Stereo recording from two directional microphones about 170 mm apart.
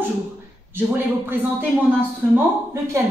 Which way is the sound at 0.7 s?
10° right (ahead or behind).